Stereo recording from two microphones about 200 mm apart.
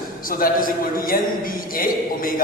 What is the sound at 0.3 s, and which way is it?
A man's voice, 45° left (ahead or behind).